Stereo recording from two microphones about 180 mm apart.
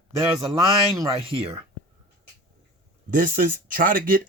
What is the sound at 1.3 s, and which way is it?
Speech, 30° right (ahead or behind).